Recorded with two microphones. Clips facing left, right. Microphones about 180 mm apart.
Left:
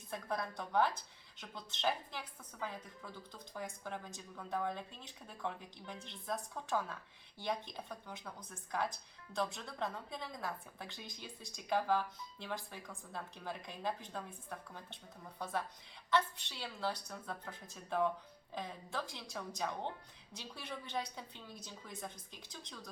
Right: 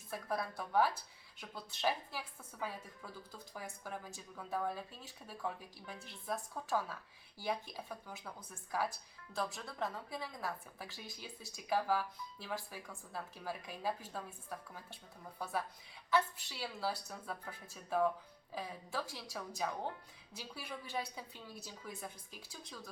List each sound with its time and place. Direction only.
0.1 s a woman's voice: 5° right (ahead or behind)